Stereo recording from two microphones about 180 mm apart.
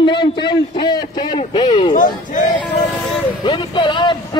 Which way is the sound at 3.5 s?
25° left (ahead or behind).